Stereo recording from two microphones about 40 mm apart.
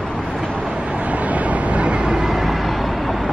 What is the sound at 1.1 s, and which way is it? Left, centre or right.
Vehicle, right.